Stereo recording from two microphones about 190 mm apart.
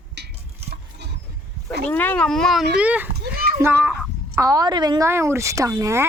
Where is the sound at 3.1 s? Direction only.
55° right (ahead or behind).